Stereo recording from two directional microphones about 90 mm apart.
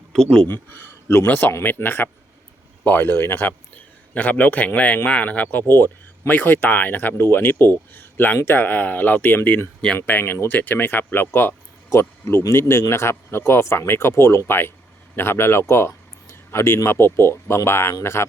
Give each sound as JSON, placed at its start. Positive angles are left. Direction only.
{"t": 0.1, "sound": "speech", "side_deg": 5}
{"t": 0.4, "sound": "speech", "side_deg": 25}